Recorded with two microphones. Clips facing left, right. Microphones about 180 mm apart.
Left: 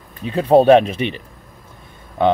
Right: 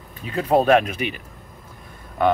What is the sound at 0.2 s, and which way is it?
Speech, 30° left (ahead or behind).